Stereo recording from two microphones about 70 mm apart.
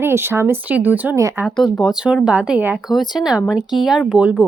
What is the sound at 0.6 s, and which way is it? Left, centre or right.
Speech, right.